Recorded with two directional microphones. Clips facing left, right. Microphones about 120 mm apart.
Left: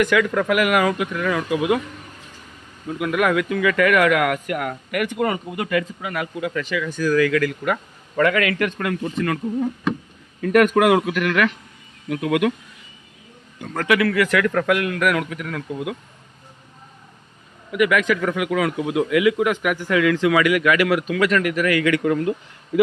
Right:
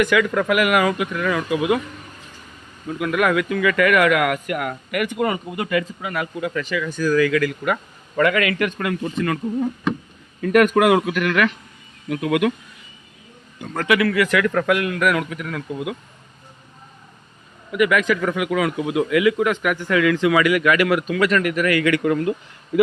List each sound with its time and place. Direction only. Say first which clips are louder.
0.0 s a man's voice: even; 10° right (ahead or behind)
2.8 s speech: even; 5° left (ahead or behind); by 5.4 s 10° right (ahead or behind)
5.5 s speech: even; 20° right (ahead or behind)
6.4 s speech: even; 35° right (ahead or behind)
7.2 s a man's voice: even; 15° right (ahead or behind)
10.4 s speech: even; centre (ahead or behind)
13.7 s a man's voice: even; 15° right (ahead or behind)
17.7 s speech: even; 30° right (ahead or behind)
18.2 s speech: even; 20° right (ahead or behind); by 20.1 s 5° left (ahead or behind)
20.1 s speech: even; 20° right (ahead or behind)
20.4 s speech: even; 35° right (ahead or behind)
21.5 s speech: even; 50° right (ahead or behind); by 22.4 s 70° right (ahead or behind)